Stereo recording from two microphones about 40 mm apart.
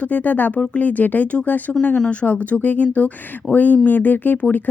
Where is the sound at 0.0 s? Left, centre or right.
Left.